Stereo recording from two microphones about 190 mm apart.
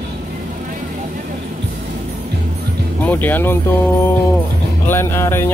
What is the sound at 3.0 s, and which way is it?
Speech, 10° left (ahead or behind).